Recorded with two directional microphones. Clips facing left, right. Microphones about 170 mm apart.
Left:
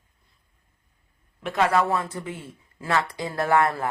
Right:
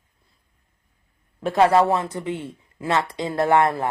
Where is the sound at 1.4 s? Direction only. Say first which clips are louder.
Right 5 dB; 35° right (ahead or behind).